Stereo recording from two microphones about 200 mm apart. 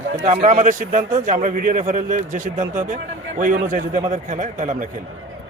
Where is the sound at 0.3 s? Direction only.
35° right (ahead or behind).